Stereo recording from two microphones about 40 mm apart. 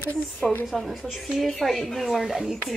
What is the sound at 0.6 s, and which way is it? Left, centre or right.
A woman's voice, centre.